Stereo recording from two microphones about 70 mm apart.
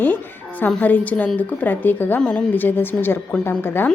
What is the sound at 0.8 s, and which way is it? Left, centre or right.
A woman's voice, left.